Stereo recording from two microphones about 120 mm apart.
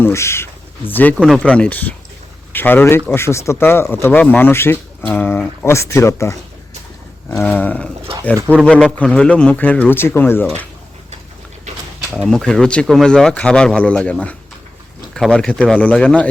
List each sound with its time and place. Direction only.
0.0 s speech: 20° left (ahead or behind)
1.2 s speech: 5° left (ahead or behind); by 6.3 s 25° left (ahead or behind)
7.4 s speech: 15° left (ahead or behind)
12.1 s speech: 5° left (ahead or behind)